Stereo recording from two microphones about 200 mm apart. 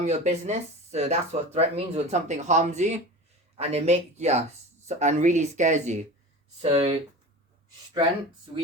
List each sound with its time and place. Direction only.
0.0 s speech: 35° right (ahead or behind)